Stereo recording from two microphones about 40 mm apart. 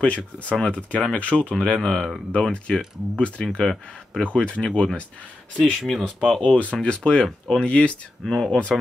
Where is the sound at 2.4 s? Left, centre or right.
Left.